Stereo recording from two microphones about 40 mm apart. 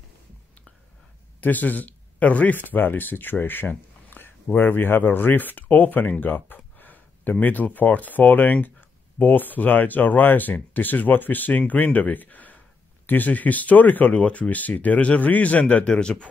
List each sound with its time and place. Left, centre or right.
1.4 s a man's voice: left
2.5 s speech: left
3.6 s a sound: left
5.1 s speech: left
14.1 s speech: left
14.5 s speech: left
15.9 s speech: left